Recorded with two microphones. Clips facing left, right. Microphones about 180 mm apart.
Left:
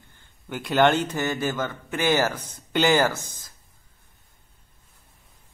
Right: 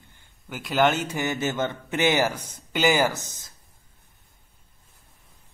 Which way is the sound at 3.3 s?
25° right (ahead or behind).